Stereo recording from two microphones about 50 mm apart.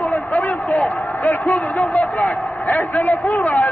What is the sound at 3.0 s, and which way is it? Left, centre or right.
Speech, left.